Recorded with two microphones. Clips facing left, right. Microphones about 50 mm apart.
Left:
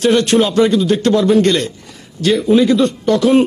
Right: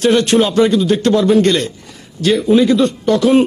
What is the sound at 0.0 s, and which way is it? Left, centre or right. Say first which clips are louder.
A man's voice: even; centre.